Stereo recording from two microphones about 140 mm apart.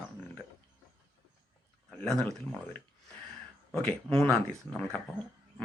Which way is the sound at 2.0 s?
5° left (ahead or behind).